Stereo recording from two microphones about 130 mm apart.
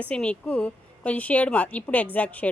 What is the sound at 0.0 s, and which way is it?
A woman's voice, 10° left (ahead or behind).